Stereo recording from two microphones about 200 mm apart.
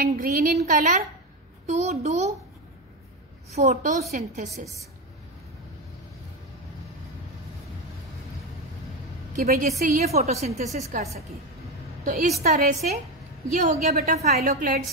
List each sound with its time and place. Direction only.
0.0 s a woman's voice: 45° right (ahead or behind)
3.5 s a woman's voice: 40° right (ahead or behind)
9.3 s a woman's voice: 45° right (ahead or behind)
10.1 s a woman's voice: 35° right (ahead or behind)
13.9 s a woman's voice: 50° right (ahead or behind)